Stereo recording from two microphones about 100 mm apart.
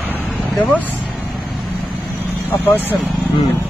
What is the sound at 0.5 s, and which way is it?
Speech, 15° left (ahead or behind).